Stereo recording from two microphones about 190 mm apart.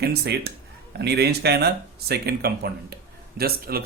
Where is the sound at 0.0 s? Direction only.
60° right (ahead or behind).